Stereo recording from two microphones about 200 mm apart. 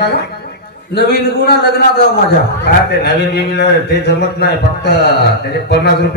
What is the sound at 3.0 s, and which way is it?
A man's voice, 55° left (ahead or behind).